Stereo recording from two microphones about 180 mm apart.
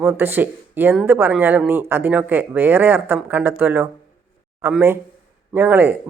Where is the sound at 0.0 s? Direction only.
10° right (ahead or behind).